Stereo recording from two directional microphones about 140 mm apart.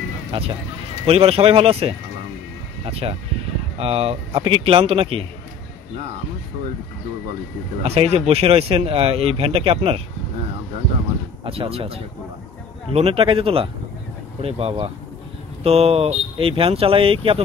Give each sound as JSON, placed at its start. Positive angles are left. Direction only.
{"t": 0.3, "sound": "speech", "side_deg": -35}
{"t": 7.8, "sound": "speech", "side_deg": -45}
{"t": 11.4, "sound": "speech", "side_deg": -40}